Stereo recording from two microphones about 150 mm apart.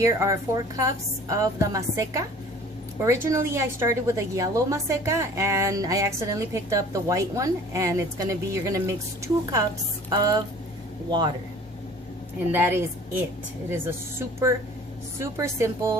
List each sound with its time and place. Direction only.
0.0 s a woman's voice: 20° right (ahead or behind)
12.5 s a woman's voice: 15° right (ahead or behind)